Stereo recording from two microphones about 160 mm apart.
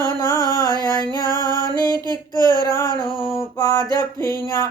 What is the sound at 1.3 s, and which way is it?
Music, 25° right (ahead or behind).